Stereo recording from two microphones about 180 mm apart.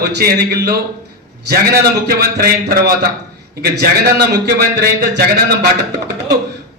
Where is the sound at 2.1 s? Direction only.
55° right (ahead or behind).